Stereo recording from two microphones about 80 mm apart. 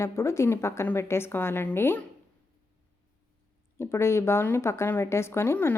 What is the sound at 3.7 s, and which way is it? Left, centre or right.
A woman's voice, left.